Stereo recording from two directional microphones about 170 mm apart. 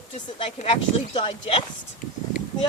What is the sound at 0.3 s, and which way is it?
A woman's voice, 30° left (ahead or behind).